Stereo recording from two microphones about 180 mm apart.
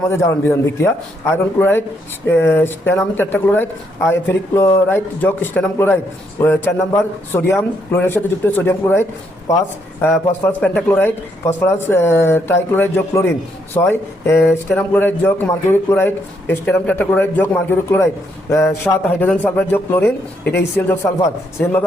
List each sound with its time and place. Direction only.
0.1 s speech: 15° left (ahead or behind)
20.4 s speech: 70° left (ahead or behind)
20.7 s speech: 15° left (ahead or behind)